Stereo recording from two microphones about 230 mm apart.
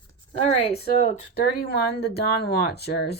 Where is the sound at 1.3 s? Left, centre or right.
Left.